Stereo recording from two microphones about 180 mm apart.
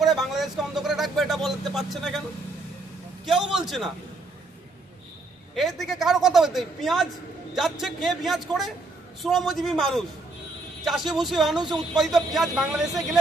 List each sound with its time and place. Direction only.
0.0 s a sound: centre (ahead or behind)
3.2 s a man's voice: centre (ahead or behind)
5.5 s a man's voice: centre (ahead or behind)